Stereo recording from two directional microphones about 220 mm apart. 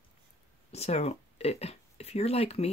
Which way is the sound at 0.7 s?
30° left (ahead or behind).